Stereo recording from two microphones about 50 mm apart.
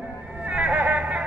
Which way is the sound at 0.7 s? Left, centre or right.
Right.